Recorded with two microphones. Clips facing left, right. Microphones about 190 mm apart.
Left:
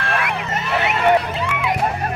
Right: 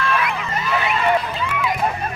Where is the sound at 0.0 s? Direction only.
70° left (ahead or behind).